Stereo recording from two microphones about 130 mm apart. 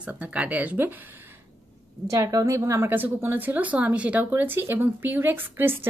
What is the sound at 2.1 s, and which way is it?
A woman's voice, 25° right (ahead or behind).